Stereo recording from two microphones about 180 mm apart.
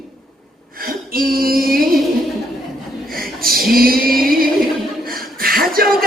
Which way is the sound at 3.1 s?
55° right (ahead or behind).